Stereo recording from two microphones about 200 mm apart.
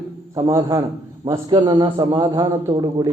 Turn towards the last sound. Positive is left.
turn(degrees=-20)  # may be behind; listen again after turning